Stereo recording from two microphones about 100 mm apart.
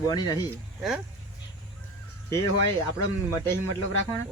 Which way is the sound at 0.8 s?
5° right (ahead or behind).